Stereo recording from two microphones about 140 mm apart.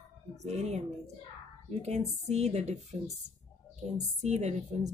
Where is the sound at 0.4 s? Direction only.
50° right (ahead or behind).